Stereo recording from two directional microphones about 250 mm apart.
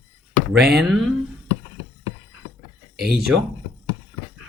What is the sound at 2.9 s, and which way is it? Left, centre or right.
Speech, right.